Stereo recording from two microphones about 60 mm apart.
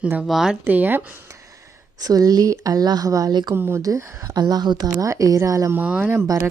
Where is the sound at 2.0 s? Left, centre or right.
Right.